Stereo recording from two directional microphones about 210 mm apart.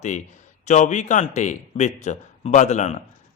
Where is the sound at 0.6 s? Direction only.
35° left (ahead or behind).